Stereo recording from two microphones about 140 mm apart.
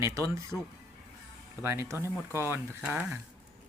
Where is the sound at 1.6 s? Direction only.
20° right (ahead or behind).